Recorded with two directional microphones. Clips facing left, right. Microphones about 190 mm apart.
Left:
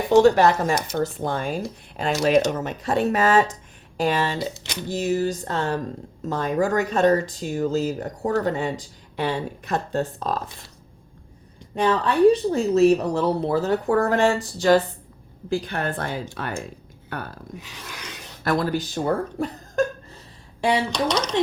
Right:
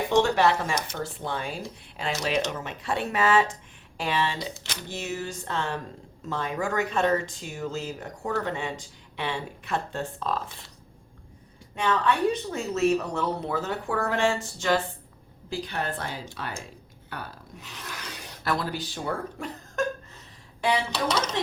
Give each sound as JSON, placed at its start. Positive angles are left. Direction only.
{"t": 0.1, "sound": "speech", "side_deg": 40}
{"t": 11.7, "sound": "speech", "side_deg": 35}
{"t": 15.4, "sound": "speech", "side_deg": 50}
{"t": 17.6, "sound": "a sound", "side_deg": 0}
{"t": 18.4, "sound": "speech", "side_deg": 45}
{"t": 20.9, "sound": "speech", "side_deg": -5}